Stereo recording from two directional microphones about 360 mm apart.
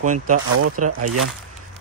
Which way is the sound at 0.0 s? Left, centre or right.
Right.